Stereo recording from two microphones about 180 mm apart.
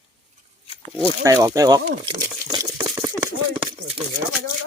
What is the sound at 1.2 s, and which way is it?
Speech, 20° right (ahead or behind).